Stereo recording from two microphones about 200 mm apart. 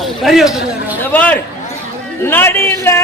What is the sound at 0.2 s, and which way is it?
A man's voice, centre (ahead or behind).